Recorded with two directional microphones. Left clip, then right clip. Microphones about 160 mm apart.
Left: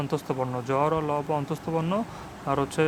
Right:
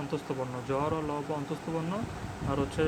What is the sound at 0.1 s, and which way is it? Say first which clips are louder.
Speech: left 6 dB; 45° left (ahead or behind).